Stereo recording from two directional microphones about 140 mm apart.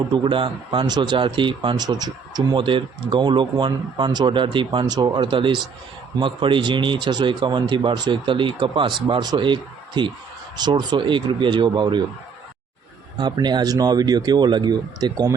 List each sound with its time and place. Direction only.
0.1 s speech: 40° right (ahead or behind)
13.1 s speech: 30° right (ahead or behind)